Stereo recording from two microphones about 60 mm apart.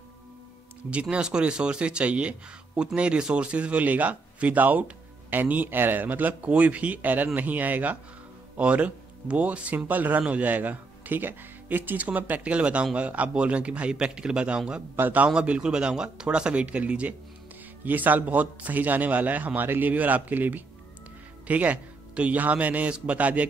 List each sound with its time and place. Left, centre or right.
1.1 s speech: centre
15.0 s a man's voice: right
15.2 s speech: centre